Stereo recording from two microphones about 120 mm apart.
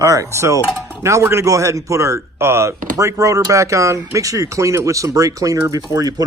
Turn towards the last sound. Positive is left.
turn(degrees=-30)  # may be behind; listen again after turning